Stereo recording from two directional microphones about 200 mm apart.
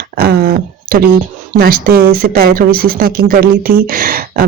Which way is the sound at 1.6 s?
50° right (ahead or behind).